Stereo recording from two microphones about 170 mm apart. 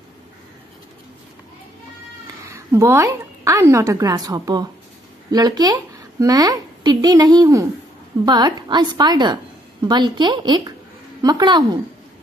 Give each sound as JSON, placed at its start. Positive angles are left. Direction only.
{"t": 2.5, "sound": "a woman's voice", "side_deg": -15}